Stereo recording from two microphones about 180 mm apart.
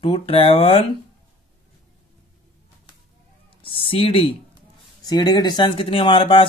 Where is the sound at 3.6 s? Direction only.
30° left (ahead or behind).